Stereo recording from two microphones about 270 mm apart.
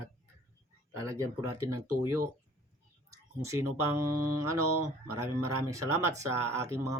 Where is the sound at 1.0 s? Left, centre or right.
Centre.